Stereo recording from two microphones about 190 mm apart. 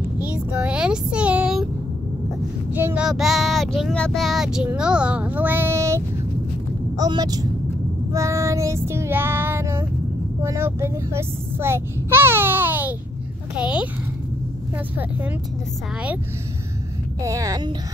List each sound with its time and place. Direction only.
0.2 s a sound: 5° right (ahead or behind)
2.7 s speech: 10° right (ahead or behind)
8.1 s child singing: 15° right (ahead or behind)
10.4 s a child's voice: 15° right (ahead or behind)
17.2 s a woman's voice: 15° right (ahead or behind)